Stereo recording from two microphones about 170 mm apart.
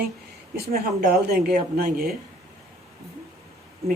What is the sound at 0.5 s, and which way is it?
Speech, 60° right (ahead or behind).